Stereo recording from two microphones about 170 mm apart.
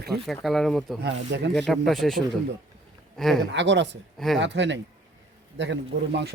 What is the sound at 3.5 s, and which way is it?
Speech, 90° right.